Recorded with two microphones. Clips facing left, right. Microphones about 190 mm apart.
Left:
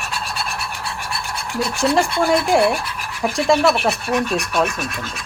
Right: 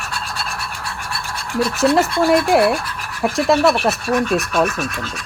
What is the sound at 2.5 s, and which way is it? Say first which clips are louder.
Speech: right 1 dB; 5° right (ahead or behind).